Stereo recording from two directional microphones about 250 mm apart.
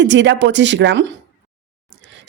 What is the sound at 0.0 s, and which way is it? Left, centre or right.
A woman's voice, right.